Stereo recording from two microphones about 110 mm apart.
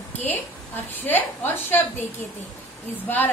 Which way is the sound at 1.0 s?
15° left (ahead or behind).